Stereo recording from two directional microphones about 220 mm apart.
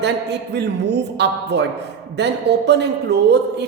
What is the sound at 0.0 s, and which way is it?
A woman's voice, 50° right (ahead or behind).